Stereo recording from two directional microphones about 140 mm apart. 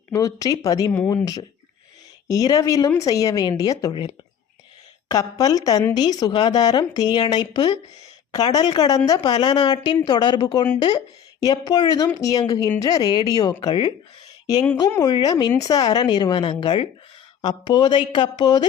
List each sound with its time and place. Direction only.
0.1 s speech: 25° left (ahead or behind)
0.9 s speech: 15° left (ahead or behind)
1.2 s a woman's voice: 25° left (ahead or behind)